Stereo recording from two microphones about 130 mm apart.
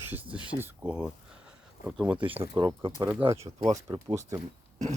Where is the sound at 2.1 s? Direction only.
45° right (ahead or behind).